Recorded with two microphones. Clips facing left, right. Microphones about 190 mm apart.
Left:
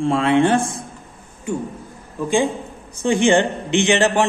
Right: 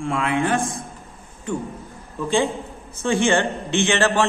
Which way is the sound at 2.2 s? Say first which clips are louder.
Left 2 dB; 15° left (ahead or behind).